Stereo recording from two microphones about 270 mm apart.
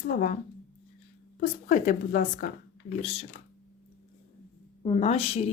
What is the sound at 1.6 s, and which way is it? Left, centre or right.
Speech, left.